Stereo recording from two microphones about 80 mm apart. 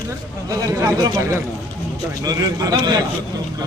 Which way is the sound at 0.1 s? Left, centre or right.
Right.